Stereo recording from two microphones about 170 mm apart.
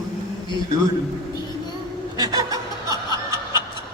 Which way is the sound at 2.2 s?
20° right (ahead or behind).